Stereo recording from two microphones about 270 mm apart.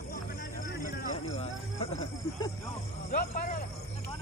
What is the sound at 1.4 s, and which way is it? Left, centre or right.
Music, left.